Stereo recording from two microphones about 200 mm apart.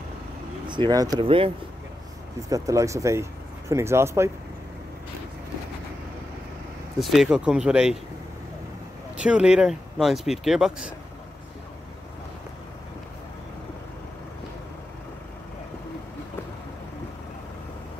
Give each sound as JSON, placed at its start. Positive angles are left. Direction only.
{"t": 0.7, "sound": "speech", "side_deg": -20}
{"t": 2.5, "sound": "speech", "side_deg": -15}
{"t": 7.0, "sound": "speech", "side_deg": 0}
{"t": 9.1, "sound": "speech", "side_deg": -5}